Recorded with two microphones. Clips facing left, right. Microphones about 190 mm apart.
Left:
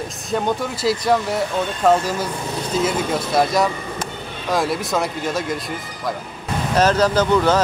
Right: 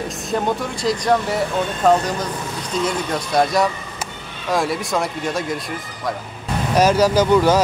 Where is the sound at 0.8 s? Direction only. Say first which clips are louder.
Even; 5° left (ahead or behind).